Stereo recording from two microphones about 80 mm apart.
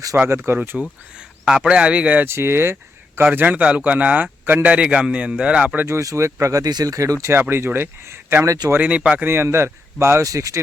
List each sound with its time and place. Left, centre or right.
0.3 s a man's voice: right
0.8 s speech: centre
2.2 s a man's voice: right; by 5.8 s centre
5.8 s a man's voice: right
8.7 s a man's voice: centre
9.3 s speech: right